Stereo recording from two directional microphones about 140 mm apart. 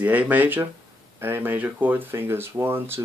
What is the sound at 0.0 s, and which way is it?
Speech, 10° right (ahead or behind).